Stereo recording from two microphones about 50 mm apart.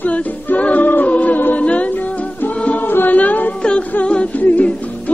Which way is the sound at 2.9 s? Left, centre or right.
Left.